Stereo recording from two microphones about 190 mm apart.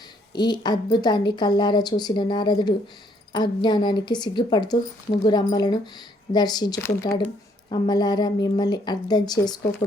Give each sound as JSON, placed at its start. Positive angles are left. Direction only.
{"t": 0.3, "sound": "a woman's voice", "side_deg": 20}